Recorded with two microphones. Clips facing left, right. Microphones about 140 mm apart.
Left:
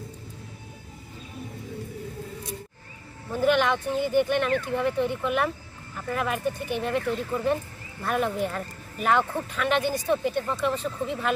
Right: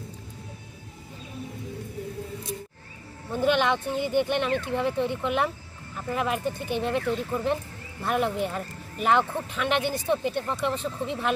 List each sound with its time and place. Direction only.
3.3 s speech: 25° right (ahead or behind)